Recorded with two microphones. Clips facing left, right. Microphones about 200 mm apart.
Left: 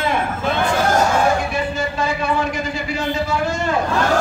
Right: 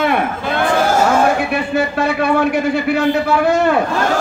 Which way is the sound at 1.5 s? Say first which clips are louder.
Right 5 dB; 65° right (ahead or behind).